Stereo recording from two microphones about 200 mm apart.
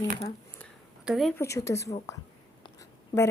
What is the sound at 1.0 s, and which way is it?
Speech, centre (ahead or behind).